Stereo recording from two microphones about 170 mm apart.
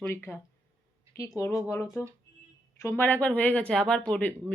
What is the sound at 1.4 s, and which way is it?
Speech, 15° left (ahead or behind).